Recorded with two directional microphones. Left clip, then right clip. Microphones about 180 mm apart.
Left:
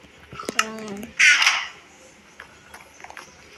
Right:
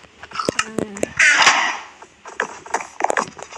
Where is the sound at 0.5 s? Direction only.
50° right (ahead or behind).